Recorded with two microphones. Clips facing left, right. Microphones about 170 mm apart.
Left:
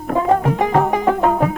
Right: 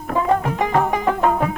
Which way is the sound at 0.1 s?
35° left (ahead or behind).